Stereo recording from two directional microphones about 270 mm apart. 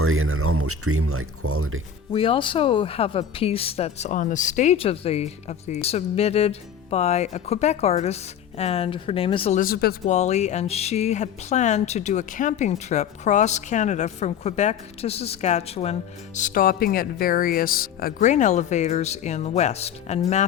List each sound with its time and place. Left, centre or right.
0.0 s speech: right
2.1 s speech: centre